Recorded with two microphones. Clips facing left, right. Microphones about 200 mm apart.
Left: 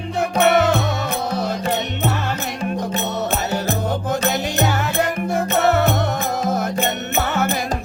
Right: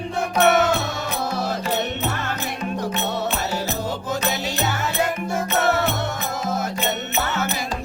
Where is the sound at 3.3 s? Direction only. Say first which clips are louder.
Left 4 dB; 50° left (ahead or behind).